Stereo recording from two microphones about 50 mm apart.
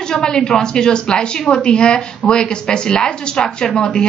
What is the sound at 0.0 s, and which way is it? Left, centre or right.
A woman's voice, centre.